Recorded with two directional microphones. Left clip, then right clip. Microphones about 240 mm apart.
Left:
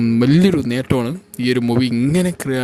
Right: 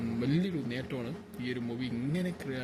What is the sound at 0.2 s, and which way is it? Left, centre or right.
A man's voice, left.